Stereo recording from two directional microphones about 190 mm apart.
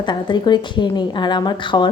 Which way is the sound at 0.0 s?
25° left (ahead or behind).